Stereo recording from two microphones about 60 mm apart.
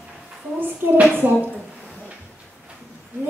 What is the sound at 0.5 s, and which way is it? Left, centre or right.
Speech, right.